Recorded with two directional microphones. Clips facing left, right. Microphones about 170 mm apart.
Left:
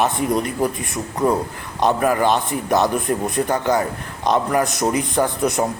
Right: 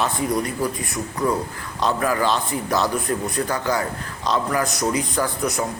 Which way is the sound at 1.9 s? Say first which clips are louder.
Left 2 dB; 20° left (ahead or behind).